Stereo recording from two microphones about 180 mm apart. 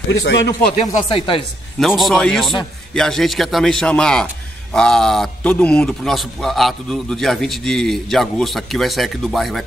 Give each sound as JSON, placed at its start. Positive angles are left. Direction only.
{"t": 0.1, "sound": "speech", "side_deg": 90}
{"t": 1.0, "sound": "speech", "side_deg": 30}
{"t": 1.8, "sound": "a man's voice", "side_deg": 0}